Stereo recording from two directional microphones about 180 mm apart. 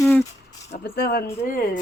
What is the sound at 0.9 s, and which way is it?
Speech, 60° left (ahead or behind).